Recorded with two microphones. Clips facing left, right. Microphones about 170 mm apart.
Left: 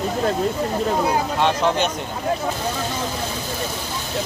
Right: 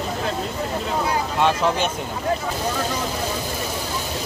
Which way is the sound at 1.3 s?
Centre (ahead or behind).